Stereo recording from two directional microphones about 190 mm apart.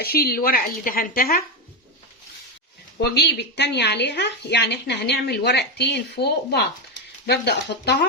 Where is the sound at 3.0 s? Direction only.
60° left (ahead or behind).